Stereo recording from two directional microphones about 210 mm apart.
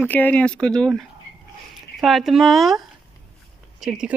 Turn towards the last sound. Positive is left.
turn(degrees=-5)  # may be behind; listen again after turning